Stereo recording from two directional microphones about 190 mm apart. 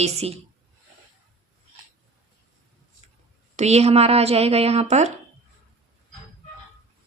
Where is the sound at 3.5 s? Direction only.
35° right (ahead or behind).